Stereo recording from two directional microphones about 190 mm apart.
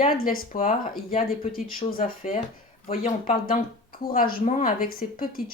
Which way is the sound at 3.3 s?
50° left (ahead or behind).